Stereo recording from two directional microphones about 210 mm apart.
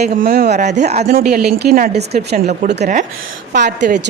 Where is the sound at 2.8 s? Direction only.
40° right (ahead or behind).